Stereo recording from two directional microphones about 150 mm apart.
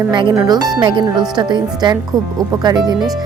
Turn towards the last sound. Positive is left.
turn(degrees=-25)  # may be behind; listen again after turning